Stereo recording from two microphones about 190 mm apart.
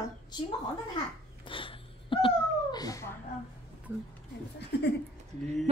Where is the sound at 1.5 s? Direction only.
25° left (ahead or behind).